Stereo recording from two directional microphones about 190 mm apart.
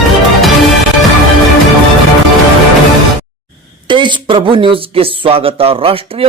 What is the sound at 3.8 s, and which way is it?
Speech, 25° right (ahead or behind).